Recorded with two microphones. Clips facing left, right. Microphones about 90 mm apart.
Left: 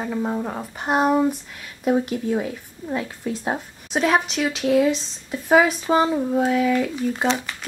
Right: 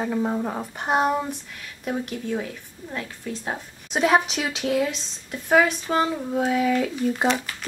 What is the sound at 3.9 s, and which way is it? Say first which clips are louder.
Speech: even; centre (ahead or behind).